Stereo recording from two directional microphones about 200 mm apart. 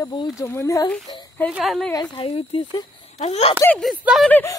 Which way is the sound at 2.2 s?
30° left (ahead or behind).